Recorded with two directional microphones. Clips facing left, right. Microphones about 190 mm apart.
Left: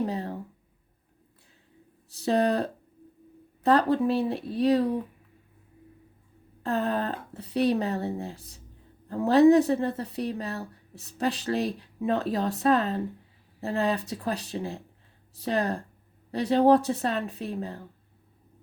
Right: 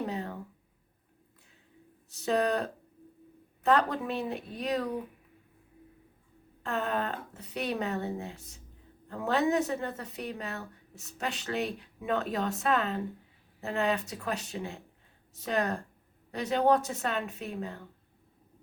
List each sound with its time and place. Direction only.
0.0 s a sound: 35° left (ahead or behind)
2.0 s speech: 35° left (ahead or behind)
6.6 s speech: 35° left (ahead or behind)